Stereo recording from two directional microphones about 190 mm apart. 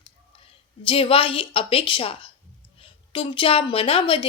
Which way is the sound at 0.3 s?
30° left (ahead or behind).